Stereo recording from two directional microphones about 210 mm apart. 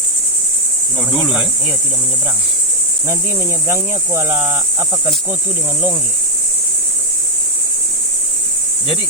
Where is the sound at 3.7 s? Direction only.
10° right (ahead or behind).